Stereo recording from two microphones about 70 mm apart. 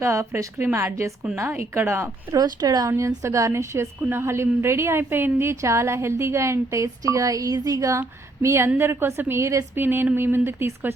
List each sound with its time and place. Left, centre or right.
0.0 s a woman's voice: right
0.6 s a woman's voice: right
2.3 s speech: right
3.2 s a woman's voice: right
9.7 s a woman's voice: right